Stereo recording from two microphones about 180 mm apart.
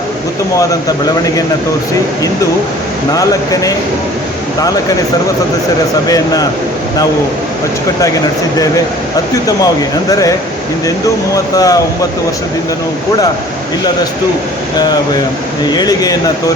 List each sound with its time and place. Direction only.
0.5 s speech: 20° left (ahead or behind)
3.1 s speech: 20° left (ahead or behind)
6.1 s speech: 20° left (ahead or behind)
10.1 s speech: 20° left (ahead or behind)
11.5 s speech: 20° left (ahead or behind)
15.7 s speech: 20° left (ahead or behind)